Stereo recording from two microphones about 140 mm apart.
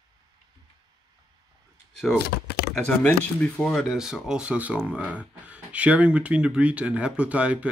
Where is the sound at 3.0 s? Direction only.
10° left (ahead or behind); by 7.7 s 10° right (ahead or behind).